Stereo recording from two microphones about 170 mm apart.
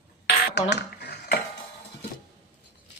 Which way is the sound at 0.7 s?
75° left (ahead or behind).